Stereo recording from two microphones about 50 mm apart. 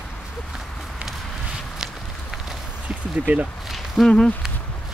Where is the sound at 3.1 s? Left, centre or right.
Right.